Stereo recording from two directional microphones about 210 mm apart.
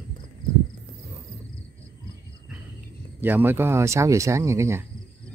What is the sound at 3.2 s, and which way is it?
Speech, 10° right (ahead or behind).